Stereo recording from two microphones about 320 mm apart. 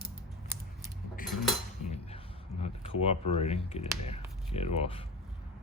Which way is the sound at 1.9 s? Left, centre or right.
Centre.